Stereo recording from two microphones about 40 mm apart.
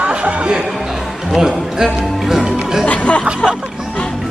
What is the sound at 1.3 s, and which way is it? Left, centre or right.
Speech, centre.